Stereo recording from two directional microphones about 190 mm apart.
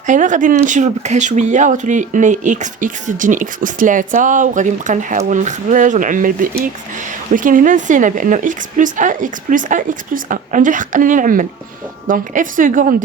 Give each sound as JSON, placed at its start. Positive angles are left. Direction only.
{"t": 0.1, "sound": "speech", "side_deg": -40}